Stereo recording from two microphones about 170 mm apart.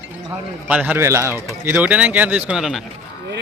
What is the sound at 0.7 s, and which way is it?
Speech, 10° right (ahead or behind).